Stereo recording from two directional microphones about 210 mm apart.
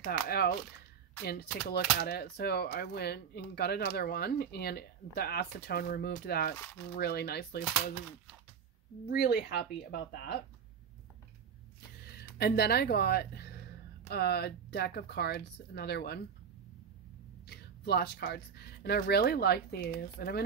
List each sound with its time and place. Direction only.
0.0 s speech: 50° left (ahead or behind)
9.1 s speech: 50° left (ahead or behind)
12.1 s speech: 50° left (ahead or behind)
17.5 s speech: 50° left (ahead or behind)